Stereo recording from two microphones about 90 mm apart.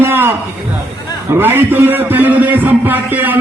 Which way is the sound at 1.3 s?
25° right (ahead or behind).